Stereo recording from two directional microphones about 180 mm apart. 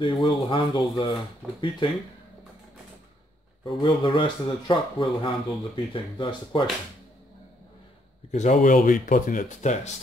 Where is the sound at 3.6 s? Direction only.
25° left (ahead or behind).